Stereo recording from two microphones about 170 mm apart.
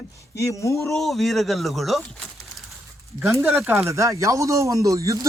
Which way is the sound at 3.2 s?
15° right (ahead or behind).